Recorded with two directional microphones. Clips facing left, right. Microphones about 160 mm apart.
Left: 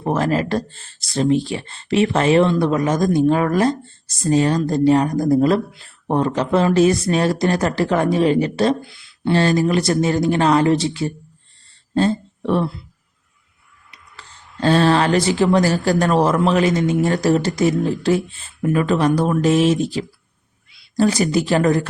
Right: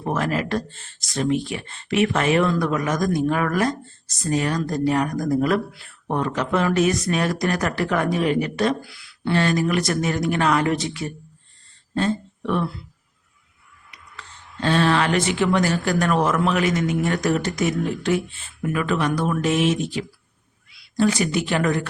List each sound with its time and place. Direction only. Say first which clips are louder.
0.0 s speech: left 5 dB; 30° left (ahead or behind)
13.9 s speech: right 1 dB; 35° left (ahead or behind)